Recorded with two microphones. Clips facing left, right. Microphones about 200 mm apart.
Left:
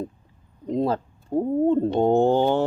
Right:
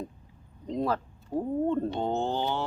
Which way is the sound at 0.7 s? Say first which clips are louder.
Left 6 dB; 25° left (ahead or behind).